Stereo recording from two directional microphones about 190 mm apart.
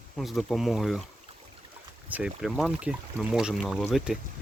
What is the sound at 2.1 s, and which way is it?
Speech, 5° right (ahead or behind).